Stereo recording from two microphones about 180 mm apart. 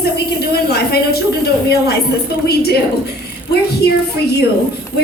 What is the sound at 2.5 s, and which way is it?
A woman's voice, 60° left (ahead or behind).